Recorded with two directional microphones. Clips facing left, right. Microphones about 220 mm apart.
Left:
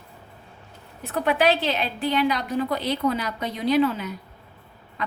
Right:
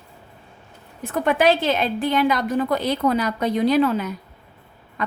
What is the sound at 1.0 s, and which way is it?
A woman's voice, 50° right (ahead or behind).